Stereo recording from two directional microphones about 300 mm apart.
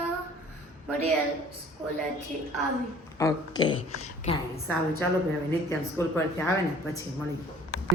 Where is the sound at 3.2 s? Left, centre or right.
Centre.